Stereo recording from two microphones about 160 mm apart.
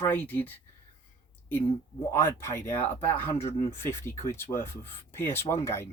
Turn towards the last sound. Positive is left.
turn(degrees=15)  # may be behind; listen again after turning